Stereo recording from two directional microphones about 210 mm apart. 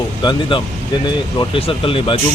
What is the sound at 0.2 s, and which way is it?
Speech, 20° left (ahead or behind).